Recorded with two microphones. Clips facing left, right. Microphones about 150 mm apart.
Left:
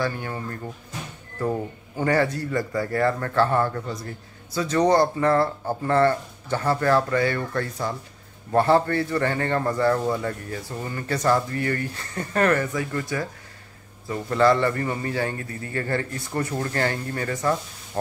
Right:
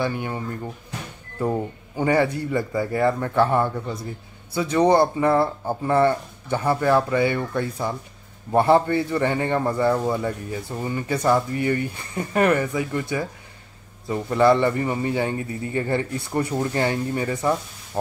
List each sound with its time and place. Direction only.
0.0 s a man's voice: 20° right (ahead or behind)
14.0 s a man's voice: 20° right (ahead or behind)